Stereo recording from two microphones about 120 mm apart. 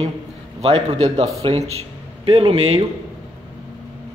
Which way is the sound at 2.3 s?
50° right (ahead or behind).